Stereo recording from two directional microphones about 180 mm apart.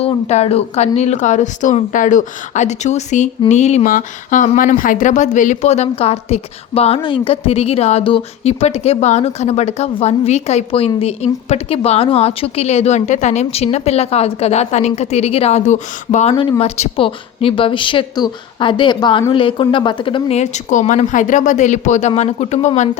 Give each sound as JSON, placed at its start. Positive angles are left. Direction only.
{"t": 0.0, "sound": "speech", "side_deg": 35}